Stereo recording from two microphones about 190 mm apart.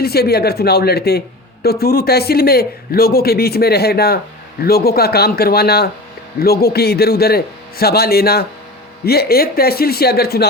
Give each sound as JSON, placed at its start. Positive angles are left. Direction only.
{"t": 0.0, "sound": "speech", "side_deg": 55}